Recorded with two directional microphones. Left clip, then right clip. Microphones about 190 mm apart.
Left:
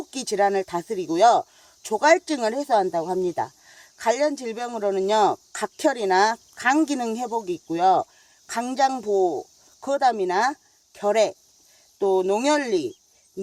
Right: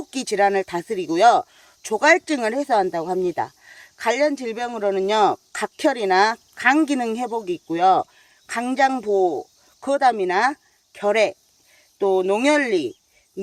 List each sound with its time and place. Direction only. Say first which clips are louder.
0.0 s speech: right 3 dB; 30° right (ahead or behind)